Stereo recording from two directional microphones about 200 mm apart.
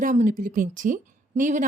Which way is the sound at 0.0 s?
40° right (ahead or behind).